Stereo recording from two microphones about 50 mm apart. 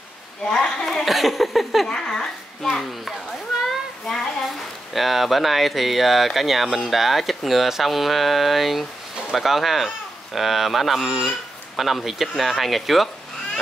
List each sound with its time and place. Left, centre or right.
0.4 s speech: centre
1.9 s speech: centre
4.9 s speech: centre